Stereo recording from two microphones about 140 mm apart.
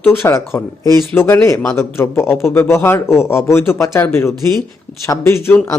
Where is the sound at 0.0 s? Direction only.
15° left (ahead or behind).